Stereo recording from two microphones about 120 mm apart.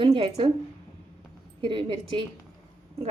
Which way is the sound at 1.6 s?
45° right (ahead or behind).